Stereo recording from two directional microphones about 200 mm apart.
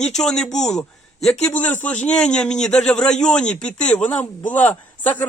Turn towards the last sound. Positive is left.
turn(degrees=10)  # may be behind; listen again after turning